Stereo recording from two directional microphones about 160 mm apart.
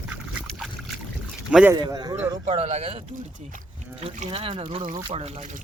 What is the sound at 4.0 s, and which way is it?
Speech, 35° right (ahead or behind).